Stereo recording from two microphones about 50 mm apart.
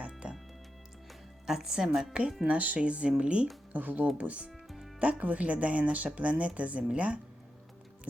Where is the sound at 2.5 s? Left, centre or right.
Right.